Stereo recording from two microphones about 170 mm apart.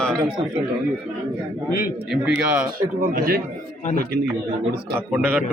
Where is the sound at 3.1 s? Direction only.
55° right (ahead or behind).